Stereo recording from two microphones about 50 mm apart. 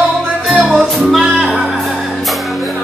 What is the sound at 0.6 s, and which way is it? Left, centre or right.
Music, right.